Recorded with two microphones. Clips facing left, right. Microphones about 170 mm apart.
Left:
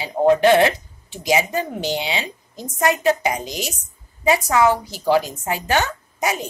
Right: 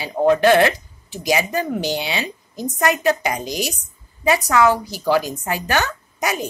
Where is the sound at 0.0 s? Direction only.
20° left (ahead or behind).